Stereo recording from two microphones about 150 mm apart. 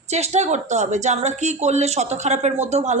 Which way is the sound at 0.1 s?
50° right (ahead or behind).